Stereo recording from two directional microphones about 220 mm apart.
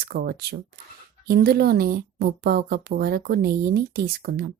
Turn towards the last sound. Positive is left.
turn(degrees=-45)  # may be behind; listen again after turning